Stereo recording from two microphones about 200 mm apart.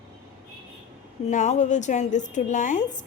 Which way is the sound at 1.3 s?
35° left (ahead or behind).